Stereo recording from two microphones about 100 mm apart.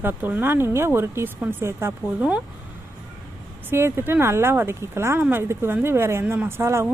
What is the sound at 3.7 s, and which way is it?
Speech, 25° right (ahead or behind).